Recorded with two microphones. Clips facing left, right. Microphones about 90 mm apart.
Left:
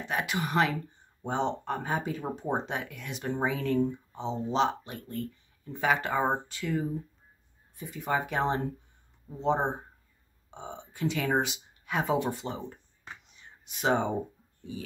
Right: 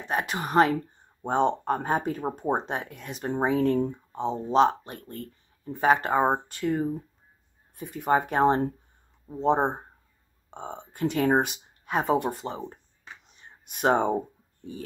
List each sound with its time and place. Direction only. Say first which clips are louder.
0.0 s speech: right 2 dB; 40° right (ahead or behind)
7.7 s speech: right 6 dB; 55° right (ahead or behind); by 12.7 s 40° right (ahead or behind)
13.3 s a sound: right 2 dB; 50° right (ahead or behind)